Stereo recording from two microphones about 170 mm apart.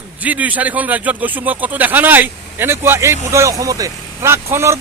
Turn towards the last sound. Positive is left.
turn(degrees=-15)  # may be behind; listen again after turning